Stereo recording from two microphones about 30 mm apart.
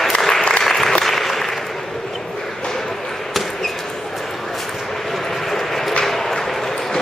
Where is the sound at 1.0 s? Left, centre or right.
Centre.